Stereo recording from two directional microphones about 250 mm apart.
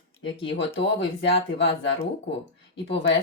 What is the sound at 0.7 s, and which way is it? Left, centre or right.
Speech, left.